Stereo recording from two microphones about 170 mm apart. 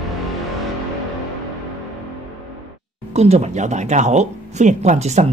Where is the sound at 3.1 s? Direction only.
40° right (ahead or behind).